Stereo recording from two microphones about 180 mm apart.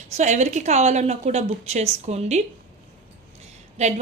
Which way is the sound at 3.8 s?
40° right (ahead or behind).